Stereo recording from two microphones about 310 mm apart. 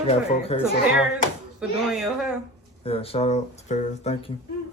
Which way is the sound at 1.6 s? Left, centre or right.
Centre.